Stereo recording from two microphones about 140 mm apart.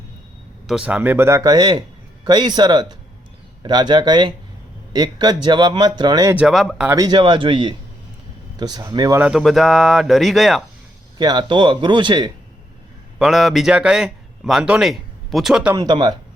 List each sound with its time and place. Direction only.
0.7 s speech: 10° right (ahead or behind)
1.4 s speech: 30° right (ahead or behind)
6.3 s speech: 5° right (ahead or behind)
6.9 s speech: 30° right (ahead or behind)
9.1 s speech: 10° right (ahead or behind)
11.2 s speech: 30° right (ahead or behind)
13.1 s a man's voice: centre (ahead or behind)
15.7 s speech: 30° right (ahead or behind)